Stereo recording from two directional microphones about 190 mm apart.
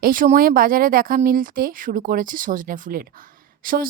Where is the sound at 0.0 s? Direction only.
45° right (ahead or behind).